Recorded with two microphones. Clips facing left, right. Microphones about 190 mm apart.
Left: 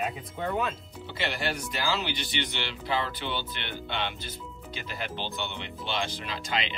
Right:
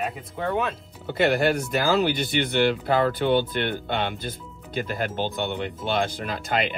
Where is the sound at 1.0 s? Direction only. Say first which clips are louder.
Right 11 dB; 50° right (ahead or behind).